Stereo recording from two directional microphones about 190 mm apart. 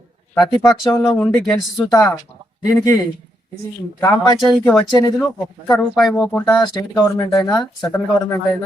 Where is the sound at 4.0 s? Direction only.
20° left (ahead or behind).